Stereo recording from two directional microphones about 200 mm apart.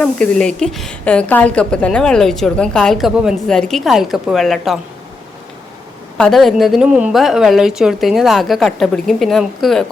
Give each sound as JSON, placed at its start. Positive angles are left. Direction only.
{"t": 0.0, "sound": "a woman's voice", "side_deg": 5}
{"t": 6.1, "sound": "a woman's voice", "side_deg": 5}